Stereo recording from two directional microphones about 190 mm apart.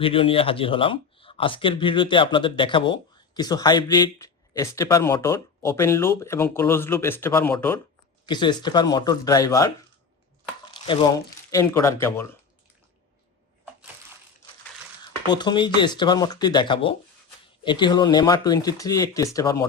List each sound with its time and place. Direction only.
0.0 s speech: 30° left (ahead or behind); by 7.8 s 10° left (ahead or behind)
8.3 s speech: 25° left (ahead or behind)
10.8 s speech: 25° left (ahead or behind)
11.5 s speech: 15° left (ahead or behind)
15.3 s speech: 25° left (ahead or behind)